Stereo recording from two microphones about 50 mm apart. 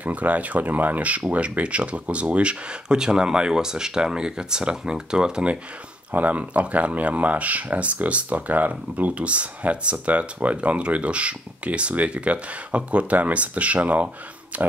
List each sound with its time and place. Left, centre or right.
0.0 s speech: right
6.1 s speech: right